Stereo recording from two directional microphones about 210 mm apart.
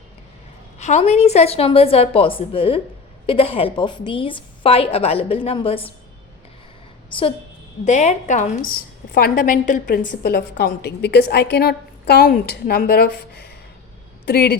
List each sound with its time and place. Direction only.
0.8 s a woman's voice: 35° left (ahead or behind)
7.9 s a woman's voice: 35° left (ahead or behind)